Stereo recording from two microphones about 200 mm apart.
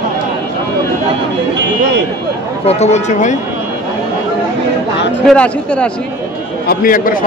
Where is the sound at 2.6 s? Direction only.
35° left (ahead or behind).